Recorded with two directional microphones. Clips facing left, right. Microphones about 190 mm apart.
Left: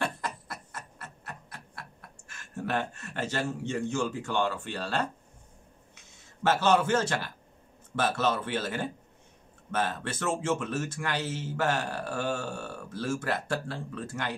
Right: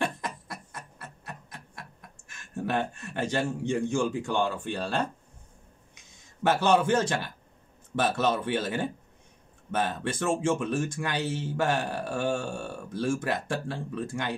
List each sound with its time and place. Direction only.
0.0 s a sound: 15° right (ahead or behind)
2.5 s a man's voice: 15° right (ahead or behind)
6.4 s a man's voice: 15° right (ahead or behind)